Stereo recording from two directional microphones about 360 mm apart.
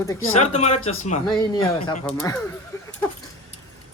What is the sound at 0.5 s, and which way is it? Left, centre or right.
Speech, centre.